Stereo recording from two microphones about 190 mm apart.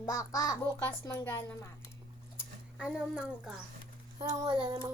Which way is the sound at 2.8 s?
5° right (ahead or behind).